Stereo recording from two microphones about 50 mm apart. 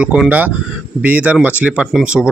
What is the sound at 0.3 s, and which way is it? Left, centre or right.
Speech, right.